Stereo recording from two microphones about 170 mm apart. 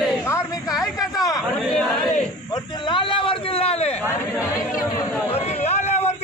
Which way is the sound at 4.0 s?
15° left (ahead or behind).